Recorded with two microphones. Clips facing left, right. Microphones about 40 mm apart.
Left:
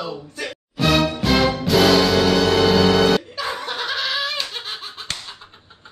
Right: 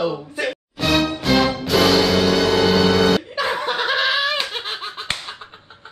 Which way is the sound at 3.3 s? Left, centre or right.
Right.